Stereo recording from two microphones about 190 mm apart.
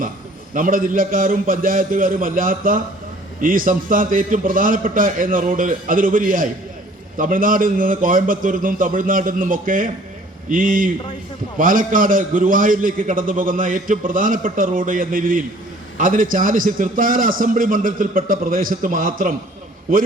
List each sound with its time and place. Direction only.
0.5 s a man's voice: 45° right (ahead or behind)